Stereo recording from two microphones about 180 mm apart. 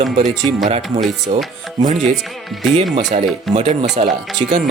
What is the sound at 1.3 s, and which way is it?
Speech, 35° right (ahead or behind).